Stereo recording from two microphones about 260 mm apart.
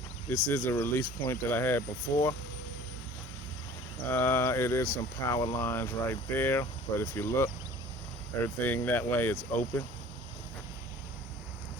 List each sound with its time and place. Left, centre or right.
0.3 s speech: centre
2.1 s speech: left
4.1 s speech: centre
8.6 s speech: centre